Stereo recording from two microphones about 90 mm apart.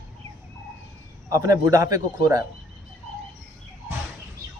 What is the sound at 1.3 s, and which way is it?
Speech, 35° right (ahead or behind).